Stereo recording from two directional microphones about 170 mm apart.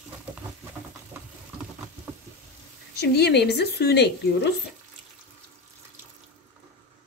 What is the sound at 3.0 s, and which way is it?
A woman's voice, 75° left (ahead or behind).